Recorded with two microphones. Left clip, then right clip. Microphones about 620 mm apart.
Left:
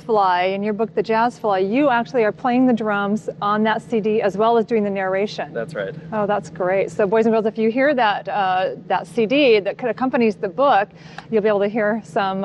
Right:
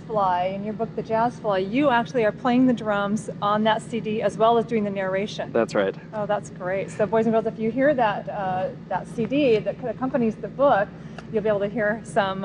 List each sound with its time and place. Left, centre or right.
0.1 s speech: left
5.5 s speech: right
6.1 s speech: left